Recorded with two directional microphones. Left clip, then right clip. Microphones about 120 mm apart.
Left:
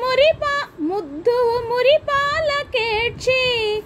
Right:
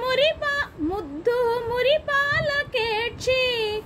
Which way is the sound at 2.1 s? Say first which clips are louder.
Left 3 dB; 55° left (ahead or behind).